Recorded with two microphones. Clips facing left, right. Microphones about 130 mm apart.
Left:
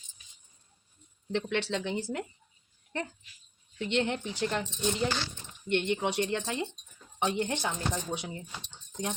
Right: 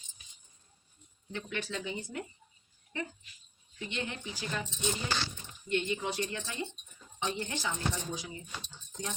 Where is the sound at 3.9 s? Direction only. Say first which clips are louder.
Left 9 dB; 70° left (ahead or behind).